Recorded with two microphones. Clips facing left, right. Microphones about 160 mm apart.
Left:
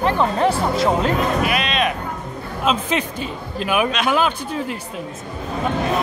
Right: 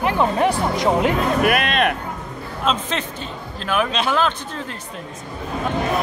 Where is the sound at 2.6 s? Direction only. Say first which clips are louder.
Left 2 dB; 10° left (ahead or behind).